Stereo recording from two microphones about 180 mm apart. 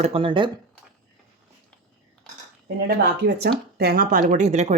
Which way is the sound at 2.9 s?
65° right (ahead or behind).